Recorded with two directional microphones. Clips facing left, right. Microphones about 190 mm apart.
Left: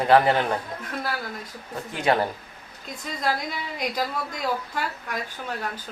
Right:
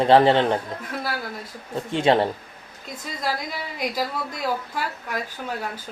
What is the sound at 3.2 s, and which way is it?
A woman's voice, 5° right (ahead or behind).